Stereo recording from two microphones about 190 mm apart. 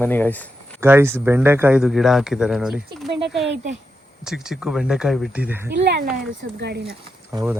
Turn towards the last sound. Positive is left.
turn(degrees=-15)  # may be behind; listen again after turning